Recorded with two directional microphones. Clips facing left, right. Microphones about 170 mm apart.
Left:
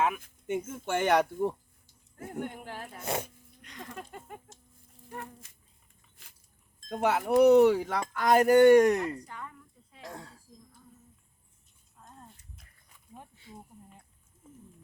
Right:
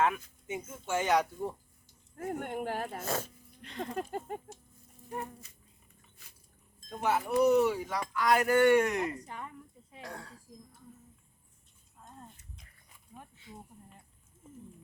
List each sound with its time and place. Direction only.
0.4 s speech: 60° left (ahead or behind)
2.1 s speech: 55° right (ahead or behind)
3.6 s speech: 30° right (ahead or behind)
3.9 s a sound: 40° right (ahead or behind)
6.8 s speech: 75° left (ahead or behind); by 9.0 s 40° left (ahead or behind)
9.0 s a woman's voice: 15° right (ahead or behind)
10.0 s speech: 20° left (ahead or behind)
12.0 s a sound: 5° right (ahead or behind)